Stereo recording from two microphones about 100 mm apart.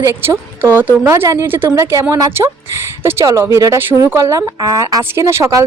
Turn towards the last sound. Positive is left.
turn(degrees=-30)  # may be behind; listen again after turning